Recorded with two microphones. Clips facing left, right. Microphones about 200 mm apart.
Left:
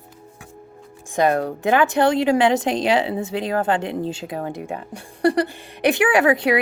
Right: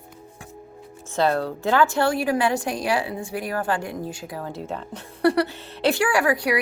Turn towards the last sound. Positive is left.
turn(degrees=25)  # may be behind; listen again after turning